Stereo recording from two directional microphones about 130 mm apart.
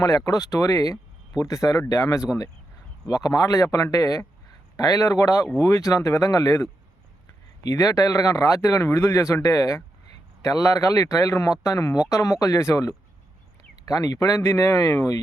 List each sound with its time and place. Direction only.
0.0 s speech: 30° left (ahead or behind)
7.7 s speech: 25° left (ahead or behind)